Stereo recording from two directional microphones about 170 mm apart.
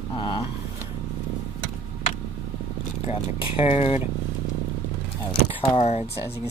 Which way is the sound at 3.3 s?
30° left (ahead or behind).